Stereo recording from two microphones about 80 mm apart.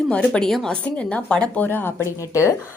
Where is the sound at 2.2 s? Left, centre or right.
Left.